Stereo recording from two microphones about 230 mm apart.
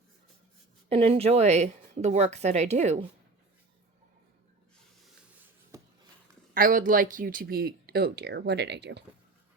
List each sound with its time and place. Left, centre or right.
0.9 s a woman's voice: right
6.5 s speech: right